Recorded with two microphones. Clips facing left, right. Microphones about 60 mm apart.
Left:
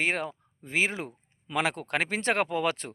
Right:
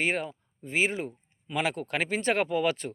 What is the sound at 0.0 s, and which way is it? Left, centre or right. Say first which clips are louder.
Speech: even; left.